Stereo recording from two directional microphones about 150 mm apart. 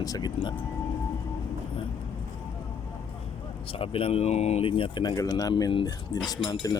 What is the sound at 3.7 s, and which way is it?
Speech, 40° left (ahead or behind).